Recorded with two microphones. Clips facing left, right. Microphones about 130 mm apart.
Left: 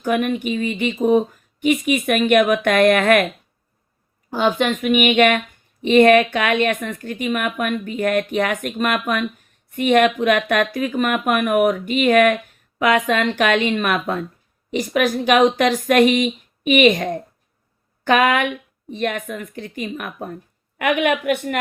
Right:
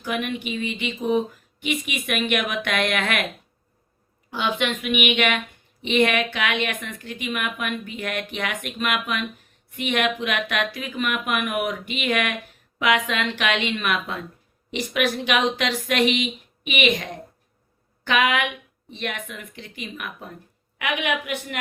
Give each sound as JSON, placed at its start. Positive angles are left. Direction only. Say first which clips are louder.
{"t": 0.0, "sound": "a woman's voice", "louder": "left 7 dB", "side_deg": 45}
{"t": 4.3, "sound": "a woman's voice", "louder": "left 6 dB", "side_deg": 45}